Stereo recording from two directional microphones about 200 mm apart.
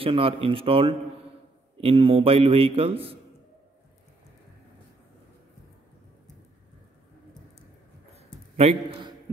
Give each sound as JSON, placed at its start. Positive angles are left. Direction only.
{"t": 0.0, "sound": "a man's voice", "side_deg": -25}
{"t": 8.5, "sound": "a man's voice", "side_deg": -30}